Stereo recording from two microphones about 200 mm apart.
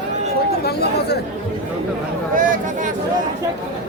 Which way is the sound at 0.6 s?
55° left (ahead or behind).